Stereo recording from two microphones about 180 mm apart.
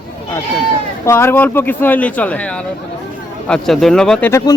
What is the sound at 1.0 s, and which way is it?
A man's voice, 15° left (ahead or behind).